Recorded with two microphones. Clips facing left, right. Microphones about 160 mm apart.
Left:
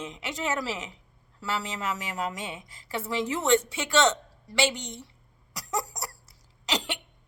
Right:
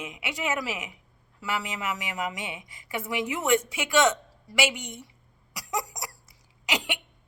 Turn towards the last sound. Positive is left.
turn(degrees=-10)  # may be behind; listen again after turning